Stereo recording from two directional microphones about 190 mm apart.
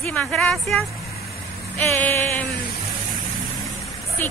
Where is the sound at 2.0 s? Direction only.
10° left (ahead or behind).